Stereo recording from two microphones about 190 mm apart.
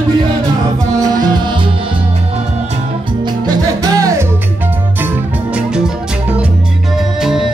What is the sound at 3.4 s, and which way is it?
Music, 20° right (ahead or behind).